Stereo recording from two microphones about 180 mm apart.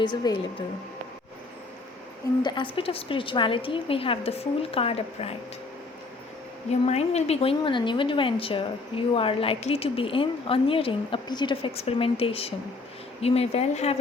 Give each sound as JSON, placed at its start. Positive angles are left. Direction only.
{"t": 0.0, "sound": "speech", "side_deg": 25}
{"t": 2.4, "sound": "a woman's voice", "side_deg": 25}
{"t": 6.7, "sound": "a woman's voice", "side_deg": 35}